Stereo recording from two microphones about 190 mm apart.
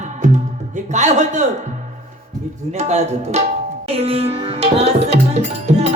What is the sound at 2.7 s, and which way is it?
Music, 35° right (ahead or behind).